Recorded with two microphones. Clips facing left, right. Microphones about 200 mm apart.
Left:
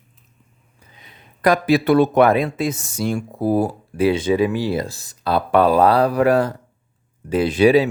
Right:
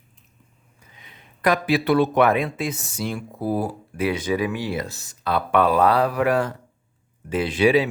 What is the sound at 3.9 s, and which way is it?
Speech, 30° left (ahead or behind).